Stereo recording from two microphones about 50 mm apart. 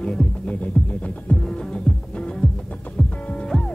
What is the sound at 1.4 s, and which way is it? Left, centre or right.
Music, centre.